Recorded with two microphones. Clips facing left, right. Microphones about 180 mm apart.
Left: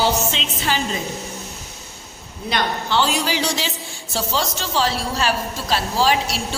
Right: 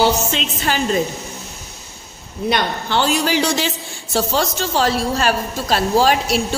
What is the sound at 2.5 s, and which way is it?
A man's voice, 55° right (ahead or behind).